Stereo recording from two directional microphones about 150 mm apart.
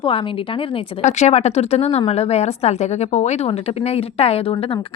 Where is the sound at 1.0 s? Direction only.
50° left (ahead or behind).